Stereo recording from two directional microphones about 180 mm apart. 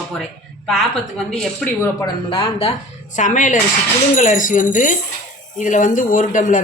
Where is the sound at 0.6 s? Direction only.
Centre (ahead or behind).